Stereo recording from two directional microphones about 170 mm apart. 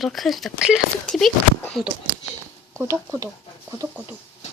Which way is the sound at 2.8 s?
15° right (ahead or behind).